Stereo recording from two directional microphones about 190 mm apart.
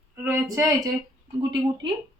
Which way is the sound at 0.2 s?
15° right (ahead or behind).